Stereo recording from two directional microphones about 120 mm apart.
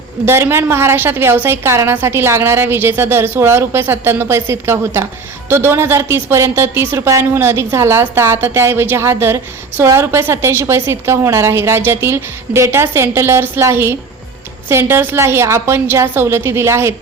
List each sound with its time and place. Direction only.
0.3 s a woman's voice: 20° right (ahead or behind)